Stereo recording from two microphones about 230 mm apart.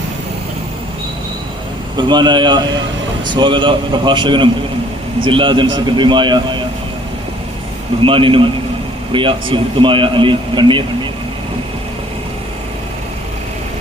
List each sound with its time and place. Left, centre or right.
2.0 s a man's voice: centre
8.0 s a man's voice: right